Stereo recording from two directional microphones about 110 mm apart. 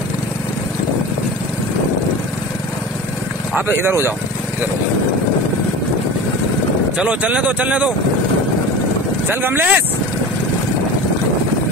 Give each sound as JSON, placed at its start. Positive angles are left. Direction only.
{"t": 3.5, "sound": "speech", "side_deg": -20}
{"t": 7.0, "sound": "speech", "side_deg": -10}
{"t": 9.3, "sound": "speech", "side_deg": -20}